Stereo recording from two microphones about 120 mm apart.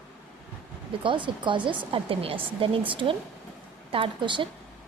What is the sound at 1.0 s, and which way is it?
Speech, 40° right (ahead or behind).